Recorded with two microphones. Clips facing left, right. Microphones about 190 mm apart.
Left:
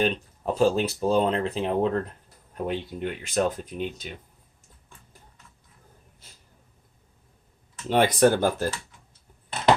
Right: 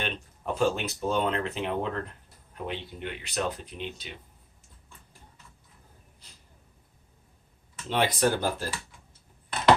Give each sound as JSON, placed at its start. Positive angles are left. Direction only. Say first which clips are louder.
{"t": 0.0, "sound": "speech", "louder": "left 9 dB", "side_deg": 35}
{"t": 7.9, "sound": "speech", "louder": "left 6 dB", "side_deg": 50}